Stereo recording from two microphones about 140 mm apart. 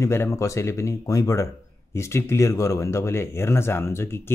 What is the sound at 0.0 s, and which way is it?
Speech, 20° left (ahead or behind).